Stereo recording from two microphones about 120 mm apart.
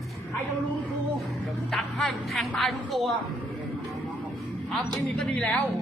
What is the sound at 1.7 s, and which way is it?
A woman's voice, 5° left (ahead or behind).